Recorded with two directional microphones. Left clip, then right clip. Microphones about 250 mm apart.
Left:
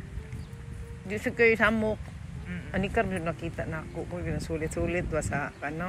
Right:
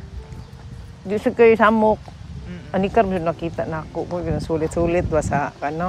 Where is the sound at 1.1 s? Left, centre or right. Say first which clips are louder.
Right 9 dB; right.